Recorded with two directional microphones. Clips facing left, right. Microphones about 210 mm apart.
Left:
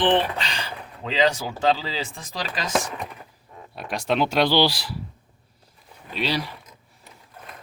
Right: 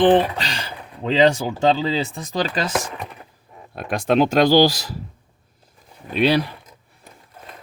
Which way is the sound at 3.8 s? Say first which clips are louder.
Right 6 dB; 55° right (ahead or behind).